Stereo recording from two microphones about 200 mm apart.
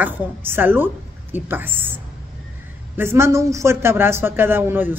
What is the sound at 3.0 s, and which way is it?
A woman's voice, 10° right (ahead or behind).